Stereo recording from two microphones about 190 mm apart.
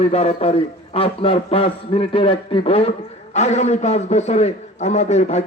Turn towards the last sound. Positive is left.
turn(degrees=35)  # may be behind; listen again after turning